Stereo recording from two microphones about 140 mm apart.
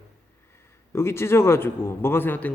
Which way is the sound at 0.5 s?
20° left (ahead or behind).